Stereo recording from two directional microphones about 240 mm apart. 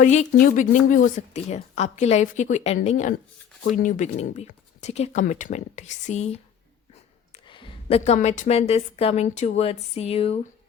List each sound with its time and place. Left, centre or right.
0.0 s speech: left
7.4 s speech: left